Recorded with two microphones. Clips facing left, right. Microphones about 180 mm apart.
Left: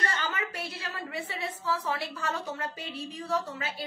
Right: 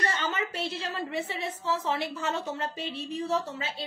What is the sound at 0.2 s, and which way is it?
A woman's voice, 25° right (ahead or behind).